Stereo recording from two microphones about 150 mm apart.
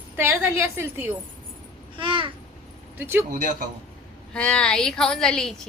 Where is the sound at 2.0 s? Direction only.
35° right (ahead or behind).